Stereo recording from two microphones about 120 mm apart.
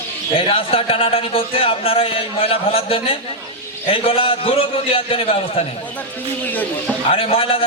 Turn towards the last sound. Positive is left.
turn(degrees=50)  # may be behind; listen again after turning